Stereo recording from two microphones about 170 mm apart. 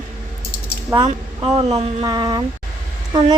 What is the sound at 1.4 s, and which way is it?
Speech, 30° right (ahead or behind).